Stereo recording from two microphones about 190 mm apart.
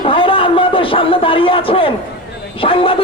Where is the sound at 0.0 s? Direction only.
30° left (ahead or behind).